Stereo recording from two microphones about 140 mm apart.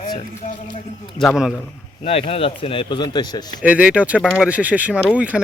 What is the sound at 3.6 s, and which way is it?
Speech, 10° right (ahead or behind).